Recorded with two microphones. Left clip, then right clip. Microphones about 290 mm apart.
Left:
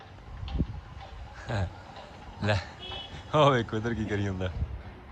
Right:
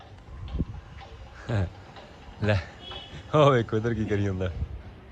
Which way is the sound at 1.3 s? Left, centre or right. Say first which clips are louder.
Right 2 dB; centre.